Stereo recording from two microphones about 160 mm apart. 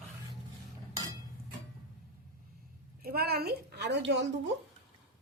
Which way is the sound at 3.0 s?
75° right (ahead or behind).